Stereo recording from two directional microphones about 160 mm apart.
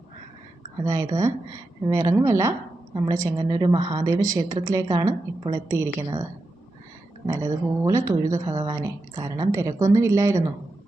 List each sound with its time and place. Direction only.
0.9 s a woman's voice: 25° right (ahead or behind)
7.3 s a woman's voice: 20° right (ahead or behind)